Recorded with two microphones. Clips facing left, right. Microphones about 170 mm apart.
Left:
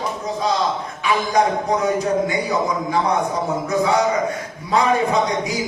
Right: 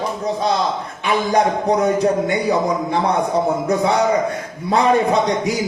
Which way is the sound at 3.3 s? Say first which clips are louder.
Right 4 dB; 35° right (ahead or behind).